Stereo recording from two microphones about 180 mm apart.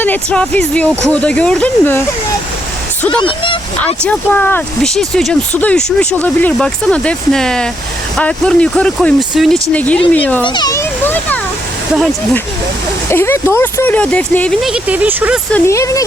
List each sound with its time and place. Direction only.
0.0 s speech: 10° left (ahead or behind)
3.1 s speech: 30° left (ahead or behind)
3.8 s speech: 5° left (ahead or behind)
10.4 s children playing: 25° left (ahead or behind)
13.1 s speech: 15° left (ahead or behind)
14.7 s speech: 10° right (ahead or behind)
15.5 s speech: 15° left (ahead or behind)